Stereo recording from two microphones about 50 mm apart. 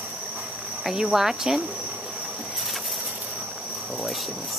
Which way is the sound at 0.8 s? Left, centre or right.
Centre.